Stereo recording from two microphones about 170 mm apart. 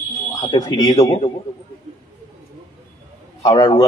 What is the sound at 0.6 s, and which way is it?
Speech, 20° left (ahead or behind).